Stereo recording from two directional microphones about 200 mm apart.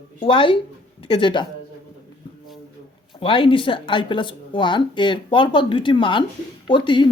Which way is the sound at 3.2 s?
25° left (ahead or behind).